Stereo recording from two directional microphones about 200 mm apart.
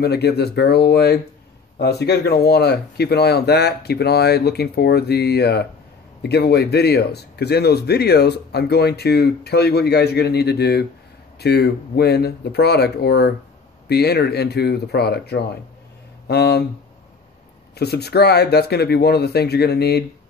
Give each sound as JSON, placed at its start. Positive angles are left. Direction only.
{"t": 0.0, "sound": "speech", "side_deg": 55}
{"t": 17.7, "sound": "speech", "side_deg": 55}